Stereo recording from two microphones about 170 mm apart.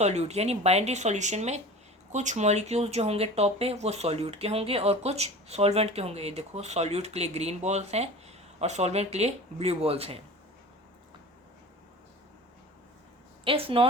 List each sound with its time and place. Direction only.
0.0 s speech: 40° right (ahead or behind)
13.4 s speech: 30° right (ahead or behind)